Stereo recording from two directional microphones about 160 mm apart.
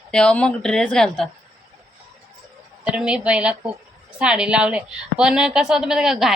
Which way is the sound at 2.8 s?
5° right (ahead or behind).